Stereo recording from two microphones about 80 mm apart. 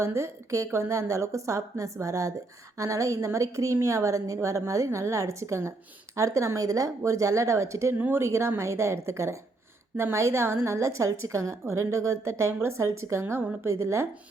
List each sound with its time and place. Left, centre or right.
0.0 s a woman's voice: right
7.9 s a woman's voice: right